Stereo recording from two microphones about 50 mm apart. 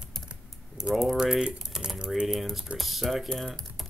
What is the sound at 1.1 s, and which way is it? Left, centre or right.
Speech, centre.